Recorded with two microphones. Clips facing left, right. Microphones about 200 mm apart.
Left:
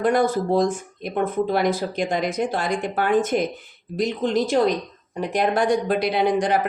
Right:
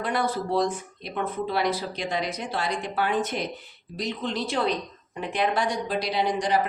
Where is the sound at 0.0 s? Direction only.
45° left (ahead or behind).